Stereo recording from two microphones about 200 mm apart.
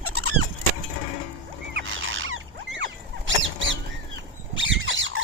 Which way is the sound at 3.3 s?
65° right (ahead or behind).